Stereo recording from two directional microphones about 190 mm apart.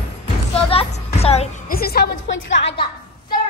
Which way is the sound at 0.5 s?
30° left (ahead or behind).